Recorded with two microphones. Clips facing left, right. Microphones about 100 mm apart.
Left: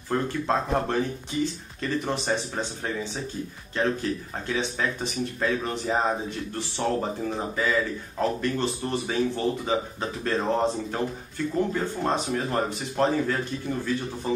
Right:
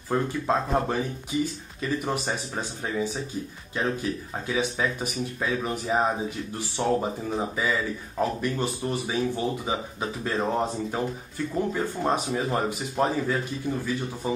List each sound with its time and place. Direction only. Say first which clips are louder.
0.1 s speech: even; 5° right (ahead or behind)